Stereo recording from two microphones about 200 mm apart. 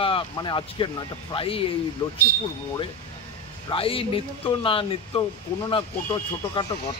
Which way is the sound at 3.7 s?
25° left (ahead or behind).